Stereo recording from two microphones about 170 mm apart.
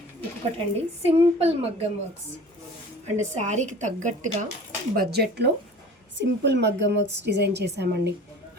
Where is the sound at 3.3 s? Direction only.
45° right (ahead or behind).